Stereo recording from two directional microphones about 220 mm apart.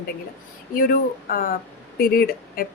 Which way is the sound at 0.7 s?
40° left (ahead or behind).